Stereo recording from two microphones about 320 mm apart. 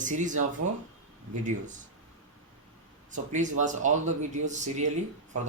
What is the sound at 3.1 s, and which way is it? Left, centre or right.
Speech, right.